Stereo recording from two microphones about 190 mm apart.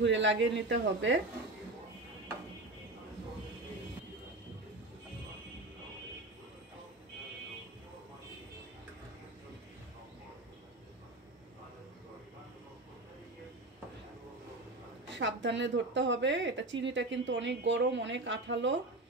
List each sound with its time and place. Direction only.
0.0 s speech: 75° right (ahead or behind)
15.0 s speech: 70° right (ahead or behind)